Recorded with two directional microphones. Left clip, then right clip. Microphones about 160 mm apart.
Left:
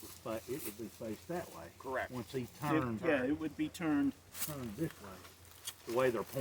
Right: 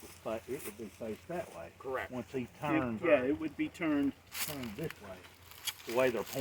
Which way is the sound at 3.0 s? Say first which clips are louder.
Right 5 dB; 35° left (ahead or behind).